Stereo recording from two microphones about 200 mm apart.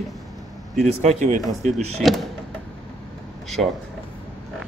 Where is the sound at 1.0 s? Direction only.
40° right (ahead or behind).